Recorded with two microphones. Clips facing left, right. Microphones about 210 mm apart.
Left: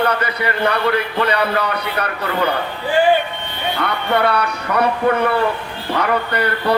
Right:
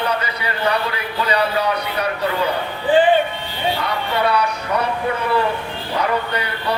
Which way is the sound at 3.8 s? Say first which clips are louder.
Left 6 dB; 60° left (ahead or behind).